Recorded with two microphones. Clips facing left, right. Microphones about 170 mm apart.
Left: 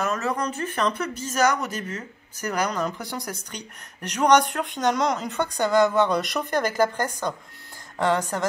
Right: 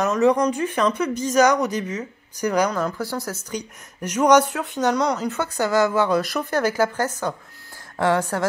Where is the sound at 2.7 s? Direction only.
20° left (ahead or behind).